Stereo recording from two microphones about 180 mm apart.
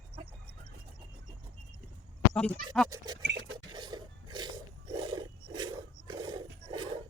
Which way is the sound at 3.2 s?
70° right (ahead or behind).